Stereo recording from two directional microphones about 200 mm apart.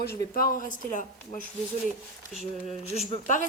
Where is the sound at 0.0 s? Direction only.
50° left (ahead or behind).